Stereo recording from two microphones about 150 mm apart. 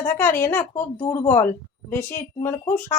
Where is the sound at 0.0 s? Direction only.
15° left (ahead or behind).